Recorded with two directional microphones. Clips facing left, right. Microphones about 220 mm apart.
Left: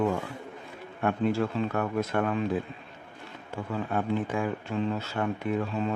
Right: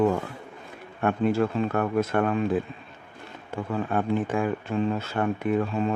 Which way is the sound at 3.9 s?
55° right (ahead or behind).